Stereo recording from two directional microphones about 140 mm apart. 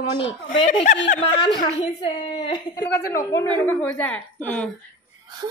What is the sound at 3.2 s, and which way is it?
A woman's voice, 20° left (ahead or behind).